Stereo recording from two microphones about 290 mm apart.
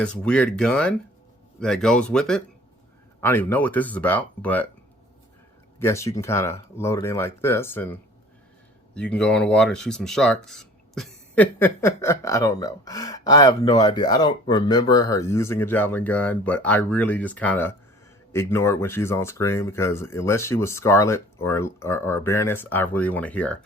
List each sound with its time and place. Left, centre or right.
0.0 s speech: centre
5.8 s speech: centre
9.0 s speech: centre